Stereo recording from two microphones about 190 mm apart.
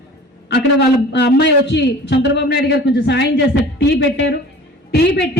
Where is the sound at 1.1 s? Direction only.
65° left (ahead or behind).